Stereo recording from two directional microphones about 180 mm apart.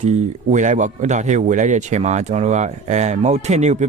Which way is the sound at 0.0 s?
40° right (ahead or behind).